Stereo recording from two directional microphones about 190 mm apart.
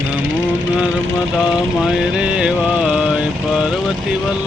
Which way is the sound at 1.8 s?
5° right (ahead or behind).